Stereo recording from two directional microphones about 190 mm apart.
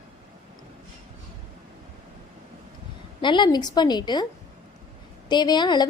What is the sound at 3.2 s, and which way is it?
A woman's voice, 25° left (ahead or behind).